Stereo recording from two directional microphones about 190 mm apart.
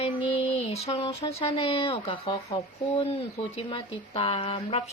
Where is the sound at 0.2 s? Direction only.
30° left (ahead or behind).